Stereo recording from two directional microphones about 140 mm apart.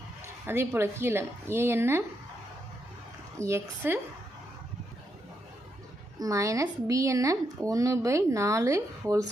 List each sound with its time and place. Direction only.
0.4 s speech: 15° right (ahead or behind)
3.3 s speech: 20° right (ahead or behind)
6.1 s speech: 25° right (ahead or behind)